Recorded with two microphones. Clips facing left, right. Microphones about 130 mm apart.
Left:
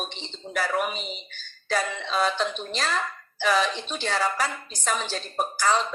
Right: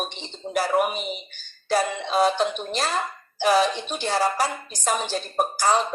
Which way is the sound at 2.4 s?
55° right (ahead or behind).